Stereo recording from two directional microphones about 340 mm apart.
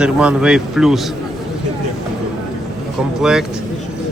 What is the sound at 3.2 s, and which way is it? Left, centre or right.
Speech, centre.